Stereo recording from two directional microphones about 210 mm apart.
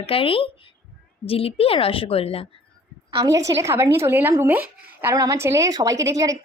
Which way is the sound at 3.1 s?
15° right (ahead or behind).